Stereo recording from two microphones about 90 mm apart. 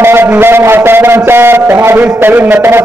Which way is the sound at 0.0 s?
25° right (ahead or behind).